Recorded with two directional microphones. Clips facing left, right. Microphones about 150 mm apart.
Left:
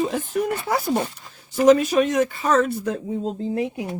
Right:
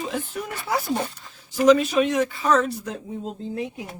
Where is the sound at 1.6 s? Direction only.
45° left (ahead or behind).